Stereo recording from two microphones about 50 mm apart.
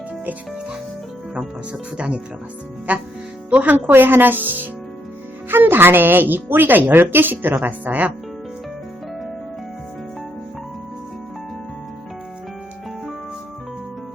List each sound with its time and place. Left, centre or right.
2.0 s a woman's voice: right